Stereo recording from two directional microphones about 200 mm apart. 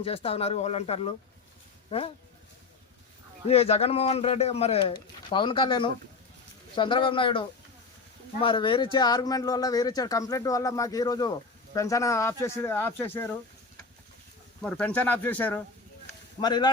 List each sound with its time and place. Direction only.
0.0 s speech: 30° left (ahead or behind)
3.4 s speech: 30° left (ahead or behind); by 13.3 s 10° left (ahead or behind)
14.6 s speech: 5° left (ahead or behind)
16.4 s speech: 20° left (ahead or behind)